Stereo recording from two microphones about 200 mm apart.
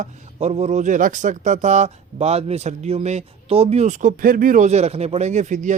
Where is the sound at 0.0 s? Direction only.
30° right (ahead or behind).